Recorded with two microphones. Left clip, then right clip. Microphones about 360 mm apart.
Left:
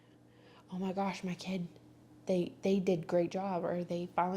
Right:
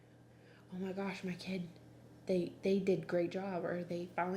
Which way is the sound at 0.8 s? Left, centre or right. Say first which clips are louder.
Left 5 dB; left.